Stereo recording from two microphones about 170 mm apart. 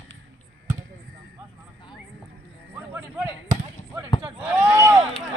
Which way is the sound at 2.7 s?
10° right (ahead or behind).